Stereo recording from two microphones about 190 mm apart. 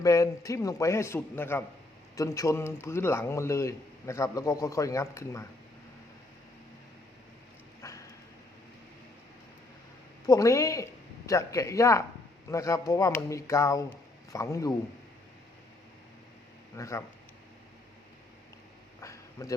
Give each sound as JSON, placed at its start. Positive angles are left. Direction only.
{"t": 0.0, "sound": "a man's voice", "side_deg": 15}
{"t": 7.8, "sound": "dog", "side_deg": 15}
{"t": 10.2, "sound": "a man's voice", "side_deg": 15}
{"t": 16.7, "sound": "speech", "side_deg": 15}
{"t": 19.0, "sound": "a sound", "side_deg": 15}